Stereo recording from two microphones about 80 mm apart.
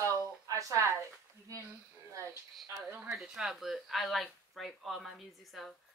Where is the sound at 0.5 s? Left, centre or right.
Right.